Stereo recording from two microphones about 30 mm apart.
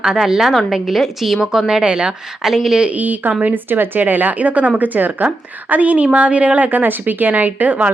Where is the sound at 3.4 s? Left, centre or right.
Right.